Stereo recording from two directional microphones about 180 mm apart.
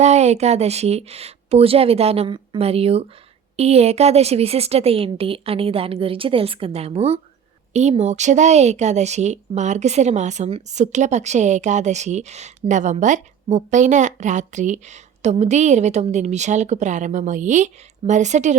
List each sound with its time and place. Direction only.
0.0 s a woman's voice: 40° right (ahead or behind)